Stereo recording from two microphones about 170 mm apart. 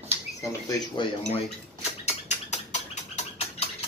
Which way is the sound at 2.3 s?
45° left (ahead or behind).